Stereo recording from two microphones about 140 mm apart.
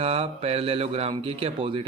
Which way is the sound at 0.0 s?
45° right (ahead or behind).